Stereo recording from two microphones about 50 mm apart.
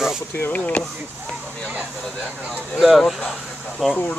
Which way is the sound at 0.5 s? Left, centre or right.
Left.